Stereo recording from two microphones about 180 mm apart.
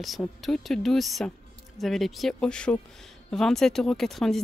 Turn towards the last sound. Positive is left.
turn(degrees=0)  # may be behind; listen again after turning